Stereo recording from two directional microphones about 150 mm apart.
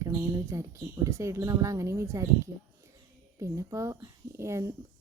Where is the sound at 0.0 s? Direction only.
20° right (ahead or behind).